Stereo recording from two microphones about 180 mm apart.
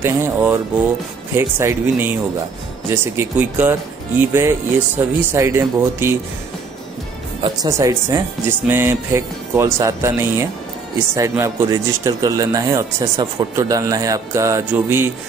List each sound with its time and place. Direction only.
0.0 s speech: 10° right (ahead or behind)
7.4 s speech: 20° right (ahead or behind)